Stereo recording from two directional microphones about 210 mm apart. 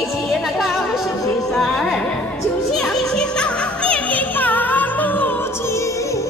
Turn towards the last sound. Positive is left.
turn(degrees=10)  # may be behind; listen again after turning